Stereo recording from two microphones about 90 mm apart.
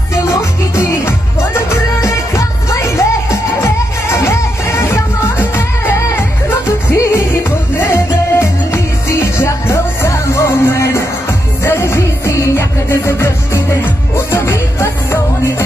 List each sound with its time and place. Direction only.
0.7 s music: 30° left (ahead or behind)